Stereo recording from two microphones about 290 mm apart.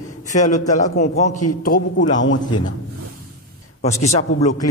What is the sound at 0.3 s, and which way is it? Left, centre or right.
A man's voice, left.